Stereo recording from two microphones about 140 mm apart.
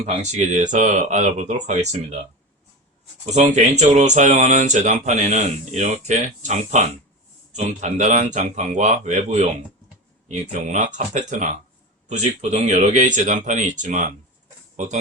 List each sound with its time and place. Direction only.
0.0 s speech: 55° right (ahead or behind)
3.2 s speech: 55° right (ahead or behind)
10.5 s speech: 60° right (ahead or behind)